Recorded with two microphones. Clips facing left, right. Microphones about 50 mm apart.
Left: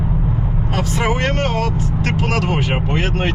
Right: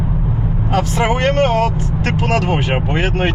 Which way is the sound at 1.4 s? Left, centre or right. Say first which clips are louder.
Right 5 dB; right.